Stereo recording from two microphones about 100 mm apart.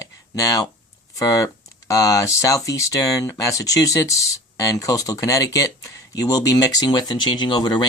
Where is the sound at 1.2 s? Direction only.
35° left (ahead or behind).